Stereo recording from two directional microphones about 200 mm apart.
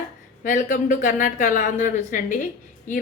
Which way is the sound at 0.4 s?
40° left (ahead or behind).